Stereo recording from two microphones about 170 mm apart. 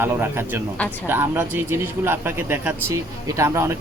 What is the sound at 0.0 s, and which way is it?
A man's voice, 15° right (ahead or behind).